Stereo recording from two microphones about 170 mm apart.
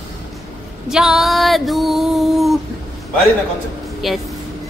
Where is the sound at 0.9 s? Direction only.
Centre (ahead or behind).